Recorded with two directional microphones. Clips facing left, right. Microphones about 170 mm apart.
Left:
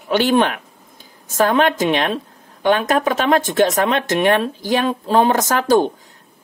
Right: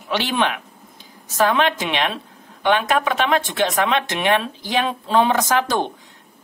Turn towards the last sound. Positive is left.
turn(degrees=45)  # may be behind; listen again after turning